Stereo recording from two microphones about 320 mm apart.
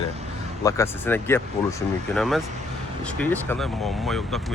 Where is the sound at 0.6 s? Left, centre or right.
Centre.